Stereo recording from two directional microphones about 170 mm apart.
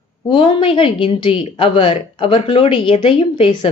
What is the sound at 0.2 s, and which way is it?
A woman's voice, 30° left (ahead or behind).